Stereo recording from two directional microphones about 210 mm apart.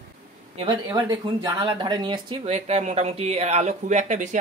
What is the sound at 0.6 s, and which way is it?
Speech, 20° right (ahead or behind).